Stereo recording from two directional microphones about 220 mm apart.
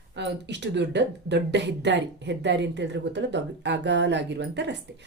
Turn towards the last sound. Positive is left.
turn(degrees=-55)  # may be behind; listen again after turning